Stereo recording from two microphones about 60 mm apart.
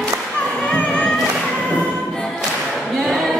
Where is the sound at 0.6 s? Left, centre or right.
Centre.